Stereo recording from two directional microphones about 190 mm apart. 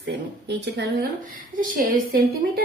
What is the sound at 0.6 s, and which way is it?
Speech, 65° right (ahead or behind).